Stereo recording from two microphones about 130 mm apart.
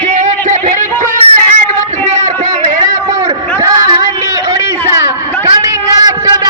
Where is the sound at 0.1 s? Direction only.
80° right.